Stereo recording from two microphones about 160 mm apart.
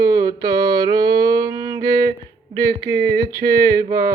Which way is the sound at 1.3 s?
25° right (ahead or behind).